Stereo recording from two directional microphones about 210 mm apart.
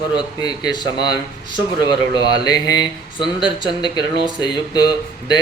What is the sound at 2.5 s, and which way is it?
Speech, 20° left (ahead or behind).